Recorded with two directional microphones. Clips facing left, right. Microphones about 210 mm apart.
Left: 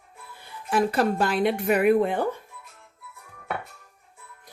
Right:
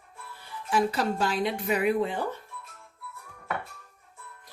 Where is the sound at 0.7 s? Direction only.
55° left (ahead or behind).